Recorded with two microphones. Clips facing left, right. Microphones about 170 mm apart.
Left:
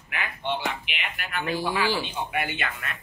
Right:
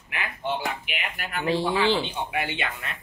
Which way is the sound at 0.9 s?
40° right (ahead or behind).